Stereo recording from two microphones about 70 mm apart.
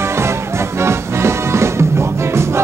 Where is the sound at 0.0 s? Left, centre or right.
Right.